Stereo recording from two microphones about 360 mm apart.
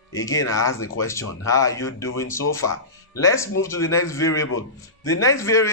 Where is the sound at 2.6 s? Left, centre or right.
Left.